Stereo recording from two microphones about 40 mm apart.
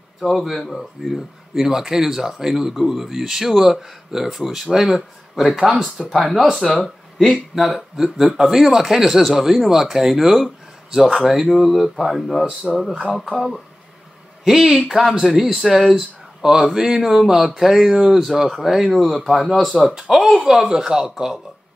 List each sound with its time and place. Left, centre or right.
0.2 s speech: centre
12.7 s speech: centre
14.4 s speech: centre
20.6 s speech: centre